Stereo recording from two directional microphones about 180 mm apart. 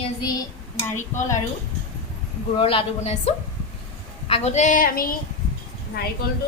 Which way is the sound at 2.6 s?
30° left (ahead or behind).